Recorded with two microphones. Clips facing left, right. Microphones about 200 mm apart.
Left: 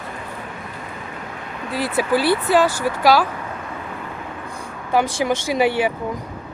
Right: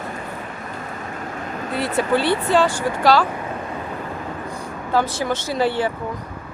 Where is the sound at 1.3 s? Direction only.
40° right (ahead or behind).